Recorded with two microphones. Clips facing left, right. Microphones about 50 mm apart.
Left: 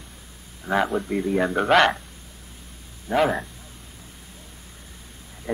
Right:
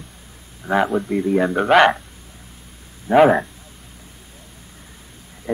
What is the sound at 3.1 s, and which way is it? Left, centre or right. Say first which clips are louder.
Speech: right 9 dB; right.